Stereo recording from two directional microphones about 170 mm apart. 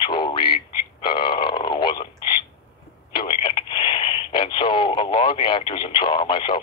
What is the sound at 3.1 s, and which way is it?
Radio, 30° left (ahead or behind).